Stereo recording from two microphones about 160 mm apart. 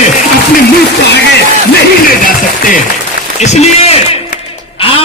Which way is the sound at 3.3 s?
45° left (ahead or behind).